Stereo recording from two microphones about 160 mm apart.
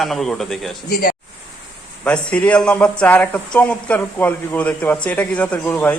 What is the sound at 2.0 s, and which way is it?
A man's voice, 5° left (ahead or behind).